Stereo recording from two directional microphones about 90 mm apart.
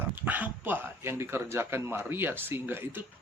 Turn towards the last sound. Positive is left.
turn(degrees=-25)  # may be behind; listen again after turning